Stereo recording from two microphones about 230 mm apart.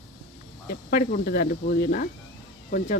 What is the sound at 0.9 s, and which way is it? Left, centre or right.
Speech, left.